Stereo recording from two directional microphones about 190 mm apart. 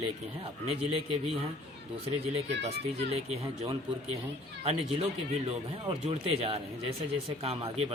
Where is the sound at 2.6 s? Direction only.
35° right (ahead or behind).